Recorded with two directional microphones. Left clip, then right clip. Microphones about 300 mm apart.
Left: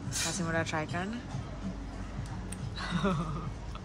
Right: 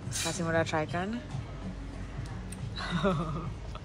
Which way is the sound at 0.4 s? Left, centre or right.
Centre.